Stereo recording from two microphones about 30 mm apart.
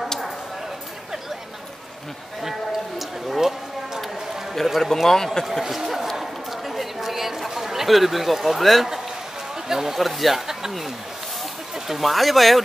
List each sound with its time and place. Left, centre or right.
3.3 s a sound: centre
4.7 s a man's voice: centre
5.4 s speech: centre
6.1 s chatter: centre
9.7 s speech: centre
9.9 s speech: centre
10.3 s speech: centre
12.0 s speech: centre